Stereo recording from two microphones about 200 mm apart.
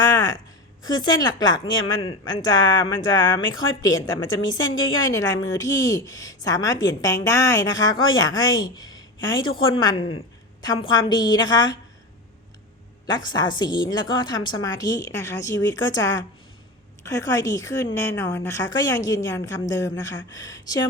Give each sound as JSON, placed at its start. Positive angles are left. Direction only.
{"t": 0.0, "sound": "speech", "side_deg": 20}
{"t": 13.1, "sound": "a woman's voice", "side_deg": 20}